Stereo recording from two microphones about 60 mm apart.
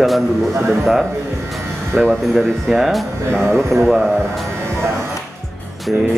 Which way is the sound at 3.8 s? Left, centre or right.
Centre.